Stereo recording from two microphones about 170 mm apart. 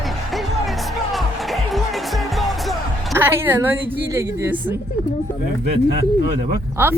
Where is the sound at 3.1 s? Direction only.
15° right (ahead or behind).